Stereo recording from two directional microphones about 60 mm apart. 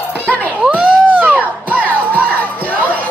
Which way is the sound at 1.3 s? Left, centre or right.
Left.